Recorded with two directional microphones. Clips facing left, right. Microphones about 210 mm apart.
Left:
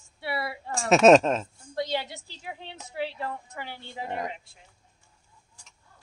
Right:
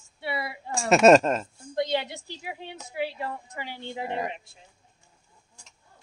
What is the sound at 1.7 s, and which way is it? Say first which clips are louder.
A woman's voice: right 3 dB; 20° right (ahead or behind).